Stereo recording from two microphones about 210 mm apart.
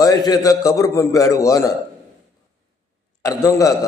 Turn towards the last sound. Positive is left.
turn(degrees=15)  # may be behind; listen again after turning